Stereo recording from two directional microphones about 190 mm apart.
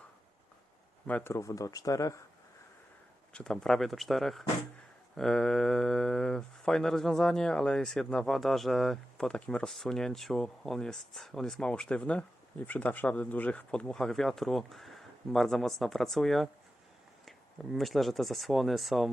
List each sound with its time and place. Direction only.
1.0 s speech: 10° left (ahead or behind)
3.3 s speech: 5° left (ahead or behind)
17.7 s speech: centre (ahead or behind)